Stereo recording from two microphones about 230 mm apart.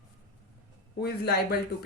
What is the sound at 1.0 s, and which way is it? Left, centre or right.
Speech, left.